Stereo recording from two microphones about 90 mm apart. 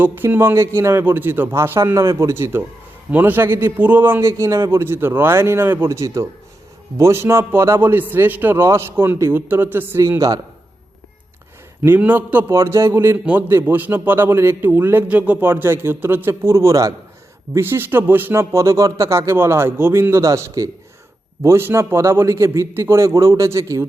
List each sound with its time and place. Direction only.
0.0 s speech: 25° right (ahead or behind)
4.3 s speech: 35° right (ahead or behind)
10.2 s speech: 45° right (ahead or behind)
11.8 s speech: 20° right (ahead or behind); by 16.9 s 35° right (ahead or behind)
17.5 s a man's voice: 25° right (ahead or behind)